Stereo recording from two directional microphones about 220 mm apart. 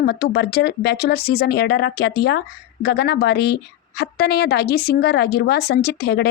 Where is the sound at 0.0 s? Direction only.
45° left (ahead or behind).